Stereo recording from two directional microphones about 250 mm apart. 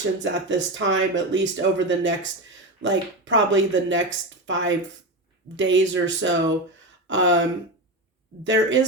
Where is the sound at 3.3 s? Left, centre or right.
Right.